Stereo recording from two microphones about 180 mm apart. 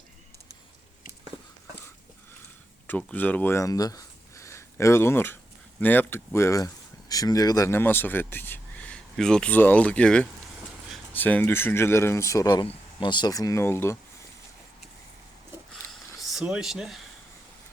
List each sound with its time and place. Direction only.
2.8 s speech: 10° left (ahead or behind)
16.3 s speech: 5° right (ahead or behind)